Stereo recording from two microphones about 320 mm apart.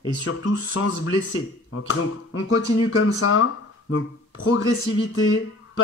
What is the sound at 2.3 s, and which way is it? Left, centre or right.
Speech, left.